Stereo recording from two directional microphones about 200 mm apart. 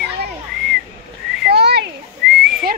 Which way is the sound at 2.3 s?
Centre (ahead or behind).